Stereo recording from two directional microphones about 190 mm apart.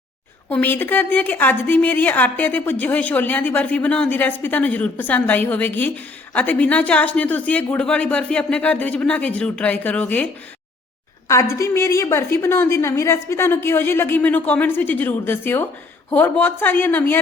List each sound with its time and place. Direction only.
0.5 s a woman's voice: 10° left (ahead or behind)
11.3 s a woman's voice: 15° left (ahead or behind)